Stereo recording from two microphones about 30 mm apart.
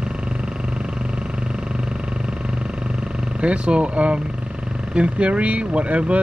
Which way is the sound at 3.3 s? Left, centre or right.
Right.